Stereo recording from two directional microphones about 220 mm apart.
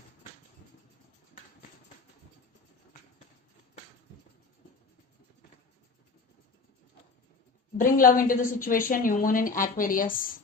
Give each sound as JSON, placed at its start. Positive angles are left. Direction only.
{"t": 7.8, "sound": "a woman's voice", "side_deg": 40}